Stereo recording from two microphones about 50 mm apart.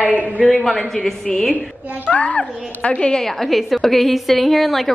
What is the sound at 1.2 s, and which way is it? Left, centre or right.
Speech, centre.